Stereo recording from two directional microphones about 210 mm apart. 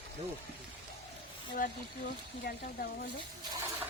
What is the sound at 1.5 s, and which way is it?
Speech, 45° left (ahead or behind).